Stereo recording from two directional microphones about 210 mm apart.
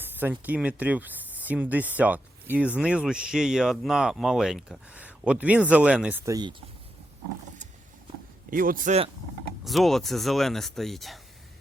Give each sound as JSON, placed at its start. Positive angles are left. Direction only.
{"t": 0.0, "sound": "speech", "side_deg": -10}
{"t": 8.4, "sound": "speech", "side_deg": -40}
{"t": 9.6, "sound": "speech", "side_deg": 0}